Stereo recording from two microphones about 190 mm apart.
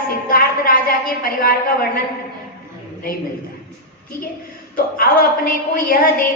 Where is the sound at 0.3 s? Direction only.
50° left (ahead or behind).